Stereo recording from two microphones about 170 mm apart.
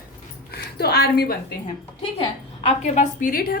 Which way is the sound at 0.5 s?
70° left (ahead or behind).